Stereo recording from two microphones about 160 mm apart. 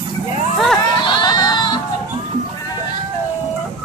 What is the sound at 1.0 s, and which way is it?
Crowd, 30° left (ahead or behind).